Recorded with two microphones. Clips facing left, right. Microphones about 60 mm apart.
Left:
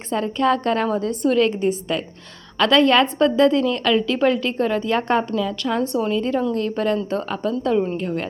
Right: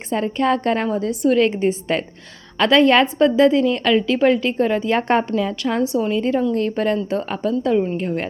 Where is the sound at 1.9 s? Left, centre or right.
Right.